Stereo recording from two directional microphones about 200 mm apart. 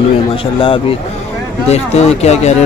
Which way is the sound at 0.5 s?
25° left (ahead or behind).